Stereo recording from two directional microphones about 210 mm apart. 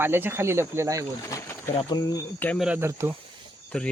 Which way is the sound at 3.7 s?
5° left (ahead or behind).